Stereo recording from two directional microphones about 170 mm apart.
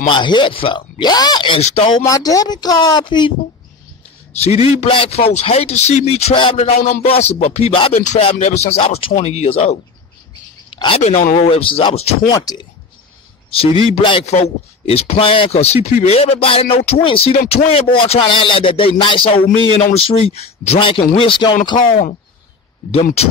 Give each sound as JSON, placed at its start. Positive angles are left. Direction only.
{"t": 0.1, "sound": "speech", "side_deg": 25}
{"t": 1.6, "sound": "speech", "side_deg": 40}
{"t": 2.0, "sound": "speech", "side_deg": 20}
{"t": 4.3, "sound": "speech", "side_deg": 40}
{"t": 12.3, "sound": "speech", "side_deg": 25}
{"t": 21.7, "sound": "speech", "side_deg": 55}